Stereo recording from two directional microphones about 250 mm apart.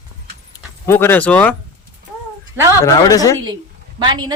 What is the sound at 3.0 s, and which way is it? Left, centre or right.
Speech, centre.